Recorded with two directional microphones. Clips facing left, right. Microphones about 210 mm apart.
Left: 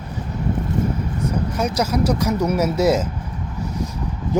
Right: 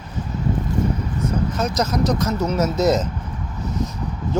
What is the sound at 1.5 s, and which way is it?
Speech, 10° left (ahead or behind).